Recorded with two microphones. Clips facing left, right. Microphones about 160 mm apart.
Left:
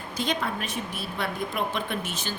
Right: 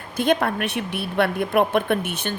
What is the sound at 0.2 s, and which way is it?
A woman's voice, 60° right (ahead or behind).